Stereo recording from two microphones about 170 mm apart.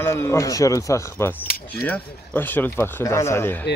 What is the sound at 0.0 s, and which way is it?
Speech, 15° left (ahead or behind).